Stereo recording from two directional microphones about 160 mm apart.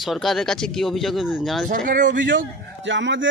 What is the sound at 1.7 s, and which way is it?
Speech, 55° right (ahead or behind).